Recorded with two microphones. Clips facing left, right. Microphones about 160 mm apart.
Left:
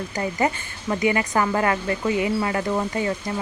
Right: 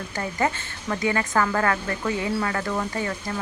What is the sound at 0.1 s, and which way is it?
A woman's voice, 15° left (ahead or behind).